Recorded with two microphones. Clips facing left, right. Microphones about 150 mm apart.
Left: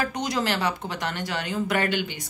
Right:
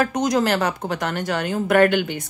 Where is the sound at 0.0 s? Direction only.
45° right (ahead or behind).